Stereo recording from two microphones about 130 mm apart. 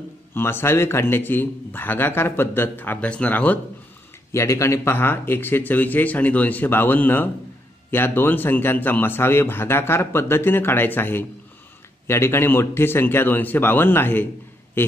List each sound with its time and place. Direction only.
0.3 s a man's voice: 20° left (ahead or behind)
4.3 s a man's voice: 25° left (ahead or behind)